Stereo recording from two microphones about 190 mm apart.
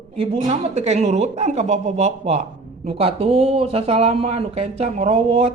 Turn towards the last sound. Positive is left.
turn(degrees=-30)  # may be behind; listen again after turning